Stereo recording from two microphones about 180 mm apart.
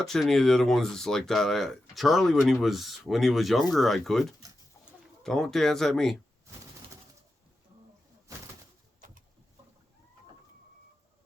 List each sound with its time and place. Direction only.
0.0 s speech: centre (ahead or behind)
9.0 s bird: 50° right (ahead or behind)